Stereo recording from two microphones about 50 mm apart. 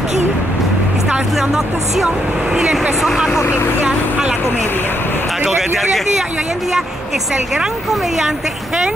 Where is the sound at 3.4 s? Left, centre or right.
Left.